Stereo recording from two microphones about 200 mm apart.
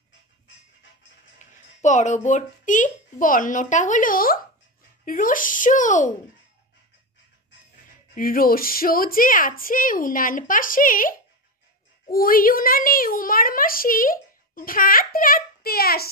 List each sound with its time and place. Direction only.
1.4 s music: 35° left (ahead or behind)
2.2 s speech: 40° left (ahead or behind)
8.1 s a child's voice: 45° left (ahead or behind)